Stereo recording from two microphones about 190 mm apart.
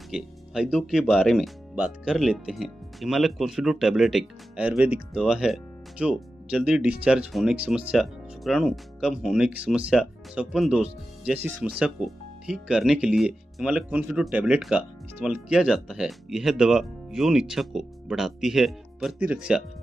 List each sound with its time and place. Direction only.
0.1 s speech: 5° right (ahead or behind)